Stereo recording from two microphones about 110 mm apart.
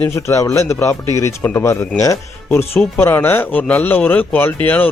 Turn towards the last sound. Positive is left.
turn(degrees=15)  # may be behind; listen again after turning